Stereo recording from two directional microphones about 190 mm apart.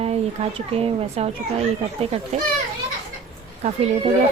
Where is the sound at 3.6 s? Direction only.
35° right (ahead or behind).